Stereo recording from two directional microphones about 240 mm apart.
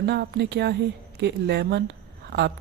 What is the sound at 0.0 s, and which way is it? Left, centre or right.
Speech, right.